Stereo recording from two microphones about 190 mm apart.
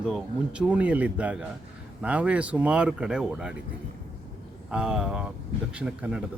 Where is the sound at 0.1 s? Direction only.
5° right (ahead or behind).